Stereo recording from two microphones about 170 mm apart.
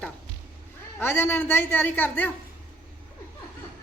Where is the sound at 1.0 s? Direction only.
15° left (ahead or behind).